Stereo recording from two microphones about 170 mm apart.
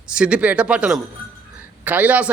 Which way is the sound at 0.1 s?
5° right (ahead or behind).